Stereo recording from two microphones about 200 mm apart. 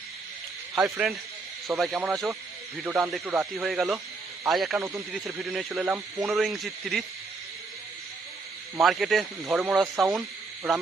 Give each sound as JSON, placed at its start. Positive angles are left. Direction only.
{"t": 0.8, "sound": "speech", "side_deg": -15}
{"t": 1.8, "sound": "speech", "side_deg": 0}
{"t": 8.8, "sound": "speech", "side_deg": 0}